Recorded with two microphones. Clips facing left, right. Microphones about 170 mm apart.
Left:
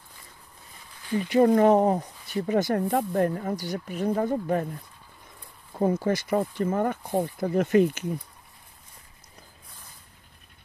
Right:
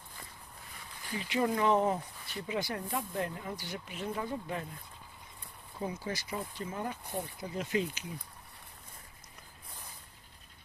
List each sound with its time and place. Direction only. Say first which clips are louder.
1.2 s speech: left 11 dB; 45° left (ahead or behind)
5.7 s speech: left 13 dB; 50° left (ahead or behind)